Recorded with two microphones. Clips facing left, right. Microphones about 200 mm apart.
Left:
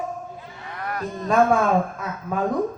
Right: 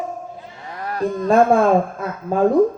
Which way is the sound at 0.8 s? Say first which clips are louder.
Right 7 dB; 30° right (ahead or behind).